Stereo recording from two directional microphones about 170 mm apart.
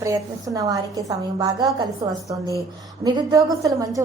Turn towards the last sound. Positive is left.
turn(degrees=-20)  # may be behind; listen again after turning